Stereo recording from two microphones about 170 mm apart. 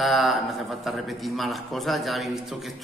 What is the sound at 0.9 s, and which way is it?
A man's voice, centre (ahead or behind).